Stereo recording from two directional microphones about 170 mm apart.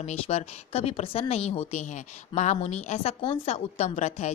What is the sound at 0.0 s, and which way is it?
A woman's voice, 40° left (ahead or behind).